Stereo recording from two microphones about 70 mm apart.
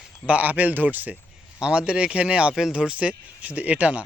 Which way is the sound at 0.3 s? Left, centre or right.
Right.